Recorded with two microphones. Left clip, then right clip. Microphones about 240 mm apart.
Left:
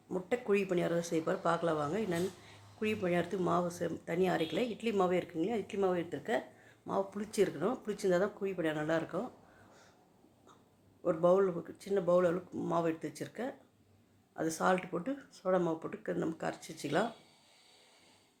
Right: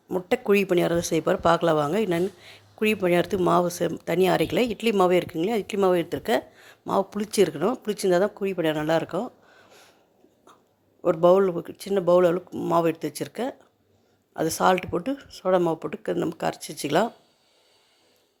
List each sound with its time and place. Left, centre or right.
0.1 s speech: right
11.0 s speech: right